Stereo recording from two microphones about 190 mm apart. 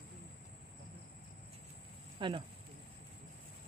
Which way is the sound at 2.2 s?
25° right (ahead or behind).